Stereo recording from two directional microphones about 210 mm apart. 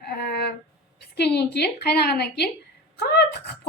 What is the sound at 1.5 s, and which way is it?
Speech, 50° left (ahead or behind).